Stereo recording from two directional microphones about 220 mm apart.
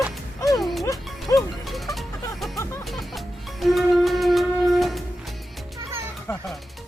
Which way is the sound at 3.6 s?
Centre (ahead or behind).